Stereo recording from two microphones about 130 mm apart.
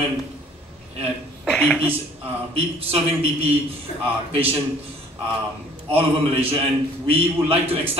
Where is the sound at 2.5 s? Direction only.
45° right (ahead or behind).